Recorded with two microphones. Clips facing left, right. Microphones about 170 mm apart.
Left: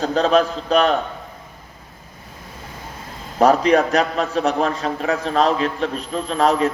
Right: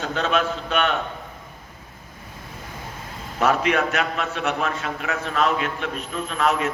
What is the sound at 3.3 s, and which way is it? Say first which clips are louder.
A man's voice: left 6 dB; 35° left (ahead or behind).